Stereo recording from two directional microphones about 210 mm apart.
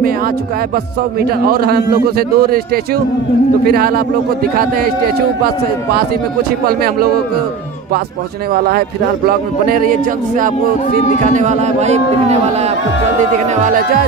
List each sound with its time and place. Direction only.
1.2 s a man's voice: 45° right (ahead or behind)
8.5 s a man's voice: 45° right (ahead or behind)